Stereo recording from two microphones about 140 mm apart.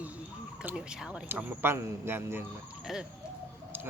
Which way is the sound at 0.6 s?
5° right (ahead or behind).